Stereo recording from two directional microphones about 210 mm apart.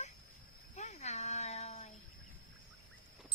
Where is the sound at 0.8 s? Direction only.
35° left (ahead or behind).